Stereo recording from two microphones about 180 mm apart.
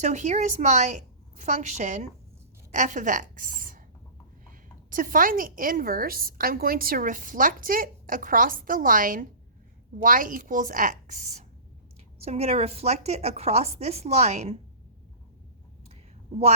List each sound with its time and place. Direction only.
0.0 s a woman's voice: 40° right (ahead or behind)
4.9 s a woman's voice: 50° right (ahead or behind)